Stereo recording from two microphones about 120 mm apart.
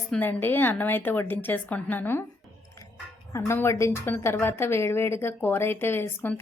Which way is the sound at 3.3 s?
20° left (ahead or behind).